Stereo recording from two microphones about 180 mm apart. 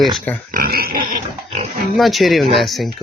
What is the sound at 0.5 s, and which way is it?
Pig, 55° right (ahead or behind).